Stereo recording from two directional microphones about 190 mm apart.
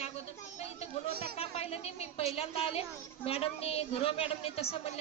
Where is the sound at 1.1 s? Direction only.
55° right (ahead or behind).